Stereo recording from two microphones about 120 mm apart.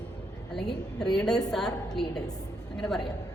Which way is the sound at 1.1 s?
5° left (ahead or behind).